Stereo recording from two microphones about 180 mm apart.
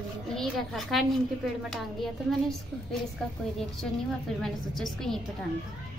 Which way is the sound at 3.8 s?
Centre (ahead or behind).